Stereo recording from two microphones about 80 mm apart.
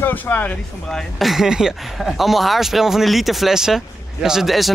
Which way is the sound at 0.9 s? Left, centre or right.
Centre.